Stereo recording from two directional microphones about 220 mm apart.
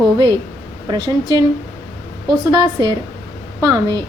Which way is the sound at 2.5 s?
20° right (ahead or behind).